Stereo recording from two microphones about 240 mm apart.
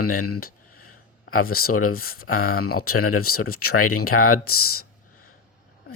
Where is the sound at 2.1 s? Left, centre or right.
Left.